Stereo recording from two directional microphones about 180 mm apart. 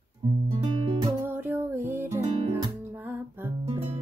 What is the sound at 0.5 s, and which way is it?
Music, 30° right (ahead or behind).